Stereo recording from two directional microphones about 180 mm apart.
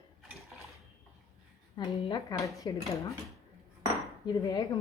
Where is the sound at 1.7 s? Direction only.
20° left (ahead or behind).